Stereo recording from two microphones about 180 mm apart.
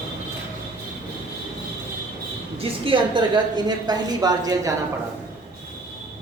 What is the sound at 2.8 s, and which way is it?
A woman's voice, 25° right (ahead or behind).